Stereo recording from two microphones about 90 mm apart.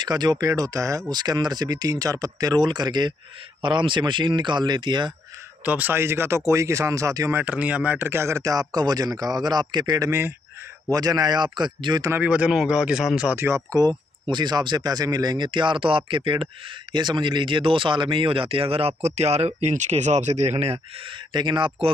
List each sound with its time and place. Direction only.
0.0 s speech: 50° right (ahead or behind)
0.5 s speech: 35° right (ahead or behind); by 5.1 s 60° right (ahead or behind)
5.7 s speech: 20° right (ahead or behind); by 7.3 s 35° right (ahead or behind)
7.3 s speech: 15° right (ahead or behind); by 12.0 s 55° right (ahead or behind)
12.1 s speech: 15° right (ahead or behind)
13.7 s speech: 55° right (ahead or behind); by 16.4 s 70° right (ahead or behind)
16.9 s speech: 55° right (ahead or behind); by 20.1 s 90° right
21.3 s speech: 60° right (ahead or behind)